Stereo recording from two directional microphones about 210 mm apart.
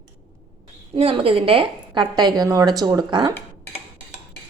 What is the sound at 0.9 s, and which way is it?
A woman's voice, 25° right (ahead or behind).